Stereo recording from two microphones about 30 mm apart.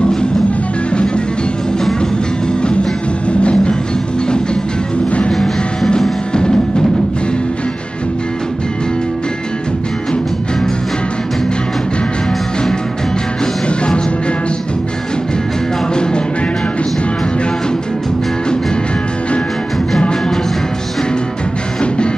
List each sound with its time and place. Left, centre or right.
0.9 s music: left
3.3 s music: left
13.7 s music: left
15.9 s music: left